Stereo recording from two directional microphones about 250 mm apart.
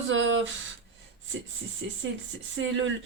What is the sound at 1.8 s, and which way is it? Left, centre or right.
Speech, right.